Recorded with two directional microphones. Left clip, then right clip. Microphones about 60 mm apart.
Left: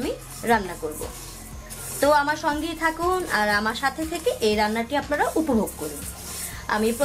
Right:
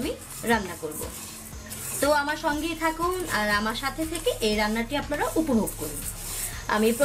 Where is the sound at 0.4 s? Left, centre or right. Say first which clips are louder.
Left 4 dB; left.